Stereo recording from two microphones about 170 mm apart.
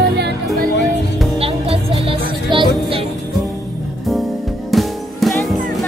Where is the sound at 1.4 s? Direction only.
35° right (ahead or behind).